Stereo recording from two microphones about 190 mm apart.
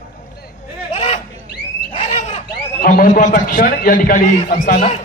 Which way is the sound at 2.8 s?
45° left (ahead or behind).